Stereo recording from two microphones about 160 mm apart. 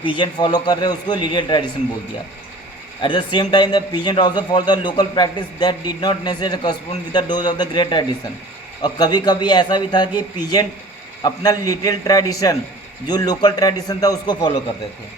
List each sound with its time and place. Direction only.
0.0 s a man's voice: 30° left (ahead or behind)
3.0 s a man's voice: 30° left (ahead or behind)